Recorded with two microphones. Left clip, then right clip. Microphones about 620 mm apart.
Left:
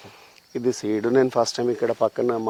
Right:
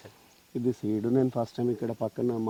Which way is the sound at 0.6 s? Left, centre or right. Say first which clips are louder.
Left 7 dB; centre.